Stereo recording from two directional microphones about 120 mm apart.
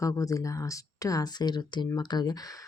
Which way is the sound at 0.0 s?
25° left (ahead or behind).